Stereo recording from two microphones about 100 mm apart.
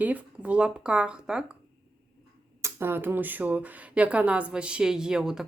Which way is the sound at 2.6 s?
20° right (ahead or behind).